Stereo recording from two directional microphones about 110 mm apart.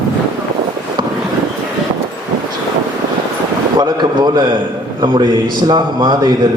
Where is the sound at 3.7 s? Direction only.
40° right (ahead or behind).